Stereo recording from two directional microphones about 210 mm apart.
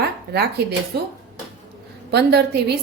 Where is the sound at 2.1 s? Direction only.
50° right (ahead or behind).